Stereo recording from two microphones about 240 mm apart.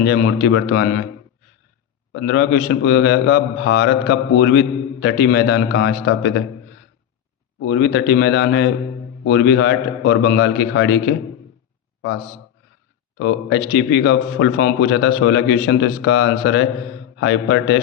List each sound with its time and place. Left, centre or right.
0.0 s a man's voice: left
2.1 s a man's voice: left
7.6 s a man's voice: left
13.1 s a man's voice: left